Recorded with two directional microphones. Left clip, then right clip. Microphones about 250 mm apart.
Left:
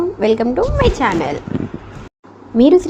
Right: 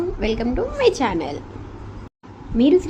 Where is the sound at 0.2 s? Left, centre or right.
Centre.